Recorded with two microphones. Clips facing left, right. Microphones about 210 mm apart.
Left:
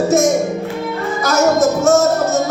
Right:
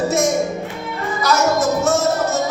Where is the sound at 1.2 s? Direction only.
45° left (ahead or behind).